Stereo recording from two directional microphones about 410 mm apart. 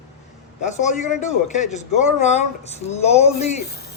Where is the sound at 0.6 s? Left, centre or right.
Centre.